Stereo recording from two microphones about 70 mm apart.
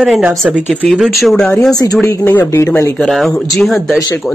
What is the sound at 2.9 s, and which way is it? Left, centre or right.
Speech, centre.